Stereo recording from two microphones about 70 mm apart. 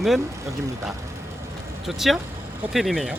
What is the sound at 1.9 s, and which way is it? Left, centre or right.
Speech, centre.